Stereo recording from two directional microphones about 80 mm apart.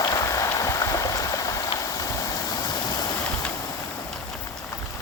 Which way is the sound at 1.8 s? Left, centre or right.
Left.